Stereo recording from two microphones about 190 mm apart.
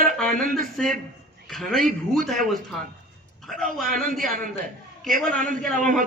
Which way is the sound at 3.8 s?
45° right (ahead or behind).